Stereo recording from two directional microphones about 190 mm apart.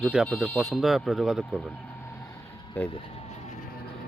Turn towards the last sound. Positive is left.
turn(degrees=30)  # may be behind; listen again after turning